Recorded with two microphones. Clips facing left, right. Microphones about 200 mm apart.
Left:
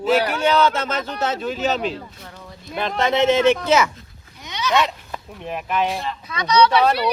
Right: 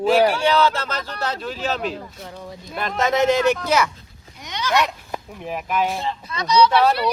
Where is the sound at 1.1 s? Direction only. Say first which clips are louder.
Left 4 dB; 5° left (ahead or behind).